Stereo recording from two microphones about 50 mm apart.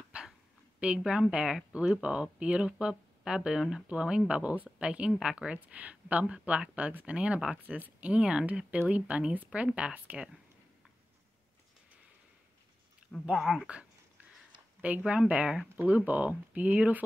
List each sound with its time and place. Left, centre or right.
0.1 s dog: right
0.7 s a woman's voice: right
13.4 s speech: centre
14.8 s speech: right
15.8 s speech: right